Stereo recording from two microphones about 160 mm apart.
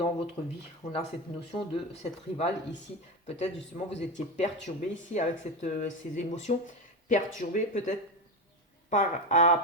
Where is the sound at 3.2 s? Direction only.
45° left (ahead or behind).